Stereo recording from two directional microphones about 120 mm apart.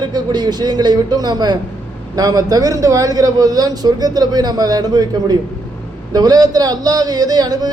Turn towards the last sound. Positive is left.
turn(degrees=-35)  # may be behind; listen again after turning